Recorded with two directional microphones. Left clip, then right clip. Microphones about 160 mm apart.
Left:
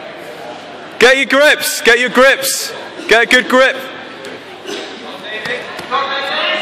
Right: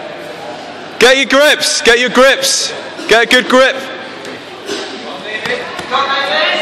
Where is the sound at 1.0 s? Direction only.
5° left (ahead or behind).